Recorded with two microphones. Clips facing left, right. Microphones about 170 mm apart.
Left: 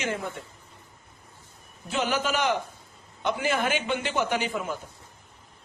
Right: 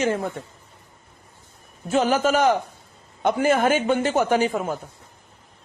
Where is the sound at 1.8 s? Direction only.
45° right (ahead or behind).